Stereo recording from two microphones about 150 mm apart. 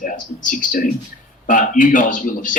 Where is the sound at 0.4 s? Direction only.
60° left (ahead or behind).